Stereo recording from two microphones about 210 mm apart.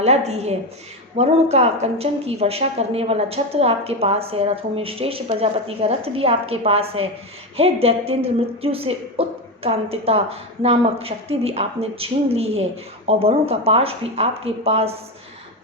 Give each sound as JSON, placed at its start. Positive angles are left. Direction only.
{"t": 0.0, "sound": "a woman's voice", "side_deg": -30}